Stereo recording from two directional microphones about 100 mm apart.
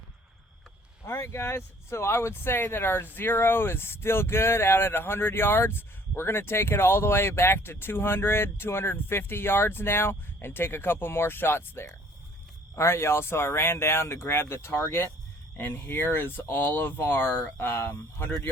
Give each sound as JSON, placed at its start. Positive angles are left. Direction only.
{"t": 1.0, "sound": "speech", "side_deg": 25}